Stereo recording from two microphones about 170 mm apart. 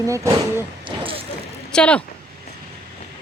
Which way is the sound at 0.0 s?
20° right (ahead or behind).